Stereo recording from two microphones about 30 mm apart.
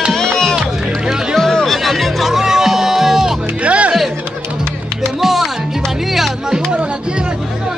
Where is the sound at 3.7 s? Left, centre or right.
Right.